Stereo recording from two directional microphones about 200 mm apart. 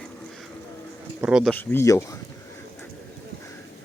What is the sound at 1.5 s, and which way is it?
Speech, 10° left (ahead or behind).